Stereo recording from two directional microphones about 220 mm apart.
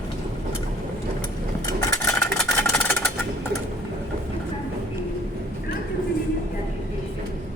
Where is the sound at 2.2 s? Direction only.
5° left (ahead or behind).